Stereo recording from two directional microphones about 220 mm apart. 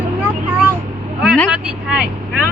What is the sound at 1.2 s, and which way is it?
Speech, centre (ahead or behind).